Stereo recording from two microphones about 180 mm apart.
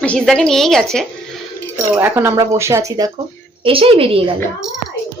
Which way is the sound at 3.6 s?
30° right (ahead or behind).